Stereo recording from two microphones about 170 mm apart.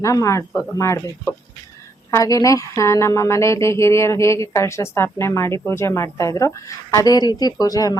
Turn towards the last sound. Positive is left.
turn(degrees=20)  # may be behind; listen again after turning